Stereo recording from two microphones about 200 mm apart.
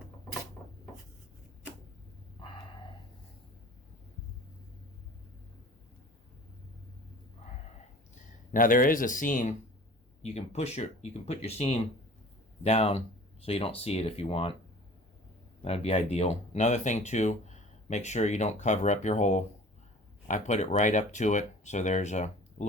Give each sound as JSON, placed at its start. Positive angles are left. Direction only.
{"t": 8.5, "sound": "speech", "side_deg": 45}
{"t": 15.6, "sound": "speech", "side_deg": 30}